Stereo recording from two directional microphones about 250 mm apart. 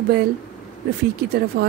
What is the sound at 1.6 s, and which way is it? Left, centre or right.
Speech, right.